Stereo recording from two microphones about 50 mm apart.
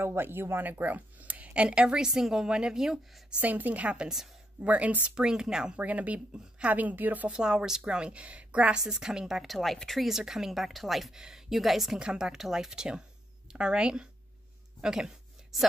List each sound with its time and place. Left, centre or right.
0.0 s speech: right
0.7 s speech: right
2.0 s a woman's voice: centre
3.3 s speech: right; by 5.8 s centre
5.8 s speech: right
7.2 s a woman's voice: centre
8.9 s a woman's voice: centre
9.5 s speech: centre
10.0 s a woman's voice: centre
12.0 s a woman's voice: centre
14.8 s a sound: centre